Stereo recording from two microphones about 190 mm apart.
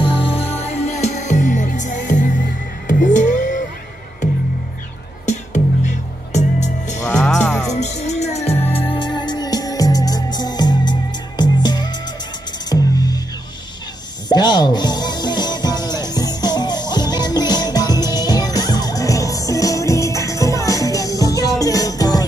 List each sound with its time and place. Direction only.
0.0 s music: 30° left (ahead or behind)
5.2 s music: 40° left (ahead or behind)
7.0 s music: 15° left (ahead or behind)
7.7 s music: 35° left (ahead or behind); by 13.2 s 20° left (ahead or behind)
14.3 s music: 20° left (ahead or behind)